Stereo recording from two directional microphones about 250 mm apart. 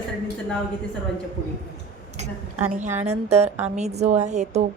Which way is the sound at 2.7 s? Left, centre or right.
Right.